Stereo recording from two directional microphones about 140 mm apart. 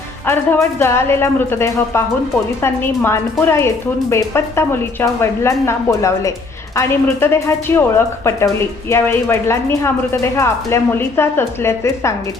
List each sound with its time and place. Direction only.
0.3 s a woman's voice: 15° left (ahead or behind)